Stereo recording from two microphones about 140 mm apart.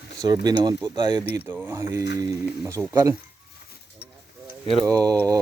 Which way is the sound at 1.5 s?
15° right (ahead or behind).